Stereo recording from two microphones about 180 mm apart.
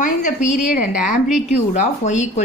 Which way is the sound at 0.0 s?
45° left (ahead or behind).